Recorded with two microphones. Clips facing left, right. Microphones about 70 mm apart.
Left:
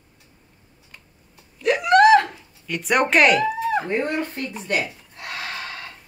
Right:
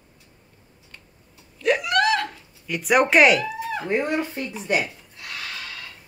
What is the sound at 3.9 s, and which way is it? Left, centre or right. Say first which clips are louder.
Speech: even; centre.